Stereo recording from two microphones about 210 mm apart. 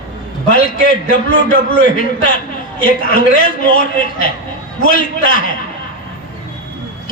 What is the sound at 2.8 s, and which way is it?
A man's voice, 40° left (ahead or behind).